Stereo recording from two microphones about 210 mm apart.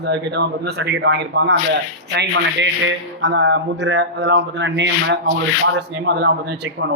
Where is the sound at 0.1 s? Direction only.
55° right (ahead or behind).